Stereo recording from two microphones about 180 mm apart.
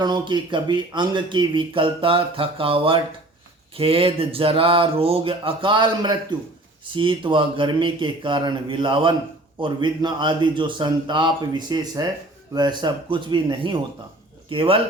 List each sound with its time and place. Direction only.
0.0 s speech: 25° right (ahead or behind)